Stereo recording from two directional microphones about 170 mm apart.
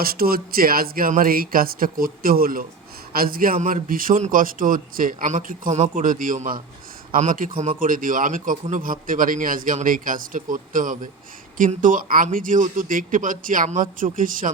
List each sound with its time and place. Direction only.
0.0 s a man's voice: 60° right (ahead or behind)